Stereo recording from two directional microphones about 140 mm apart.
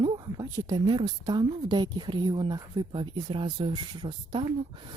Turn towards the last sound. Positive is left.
turn(degrees=-35)  # may be behind; listen again after turning